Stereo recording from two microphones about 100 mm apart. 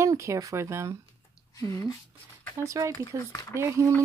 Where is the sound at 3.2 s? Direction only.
35° left (ahead or behind).